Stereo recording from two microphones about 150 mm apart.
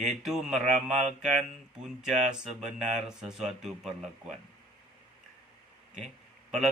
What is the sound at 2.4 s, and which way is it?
A man's voice, 5° right (ahead or behind).